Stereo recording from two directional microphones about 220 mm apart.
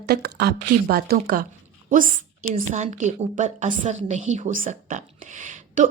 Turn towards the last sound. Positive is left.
turn(degrees=-35)  # may be behind; listen again after turning